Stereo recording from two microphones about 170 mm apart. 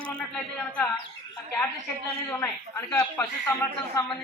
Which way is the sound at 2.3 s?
10° left (ahead or behind).